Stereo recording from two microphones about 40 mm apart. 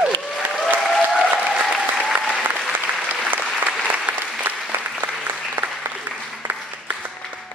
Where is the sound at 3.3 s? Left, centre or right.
Right.